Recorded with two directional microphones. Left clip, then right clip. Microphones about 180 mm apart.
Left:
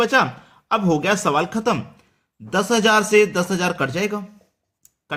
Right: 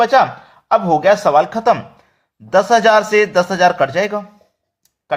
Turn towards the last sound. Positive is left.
turn(degrees=25)  # may be behind; listen again after turning